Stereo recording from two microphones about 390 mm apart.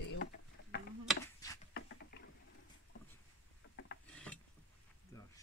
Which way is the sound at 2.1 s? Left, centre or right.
Left.